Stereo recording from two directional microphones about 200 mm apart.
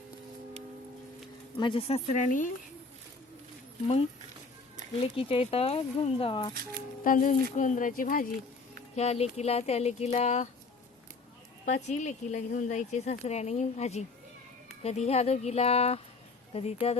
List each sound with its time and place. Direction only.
1.5 s speech: 25° left (ahead or behind)
2.1 s speech: 40° left (ahead or behind)
4.9 s speech: 25° left (ahead or behind)
7.0 s speech: 40° left (ahead or behind)
9.0 s speech: 30° left (ahead or behind)
11.6 s speech: 35° left (ahead or behind)